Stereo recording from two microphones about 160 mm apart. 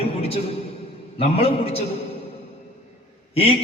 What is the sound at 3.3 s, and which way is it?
Speech, 35° left (ahead or behind).